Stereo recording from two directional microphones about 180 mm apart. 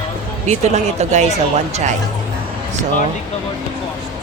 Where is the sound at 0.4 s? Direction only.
40° right (ahead or behind).